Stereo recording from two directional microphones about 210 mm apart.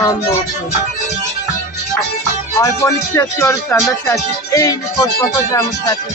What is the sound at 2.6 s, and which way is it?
Speech, 15° left (ahead or behind).